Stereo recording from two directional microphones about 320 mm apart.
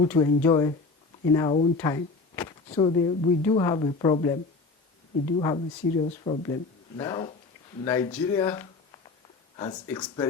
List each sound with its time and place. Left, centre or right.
0.0 s a woman's voice: centre
5.4 s a woman's voice: centre